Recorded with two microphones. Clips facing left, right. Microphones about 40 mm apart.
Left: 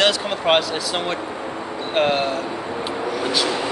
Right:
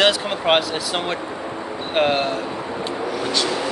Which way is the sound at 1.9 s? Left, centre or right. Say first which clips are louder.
Even; centre.